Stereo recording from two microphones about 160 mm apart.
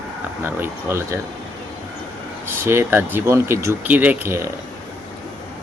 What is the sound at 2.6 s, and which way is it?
Speech, 15° right (ahead or behind).